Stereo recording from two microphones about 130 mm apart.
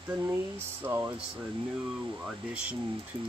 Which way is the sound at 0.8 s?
20° right (ahead or behind).